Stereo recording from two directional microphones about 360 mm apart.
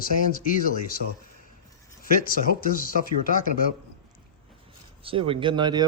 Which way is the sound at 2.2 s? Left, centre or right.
Left.